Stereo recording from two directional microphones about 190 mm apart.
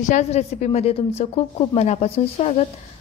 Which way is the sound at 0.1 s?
35° left (ahead or behind).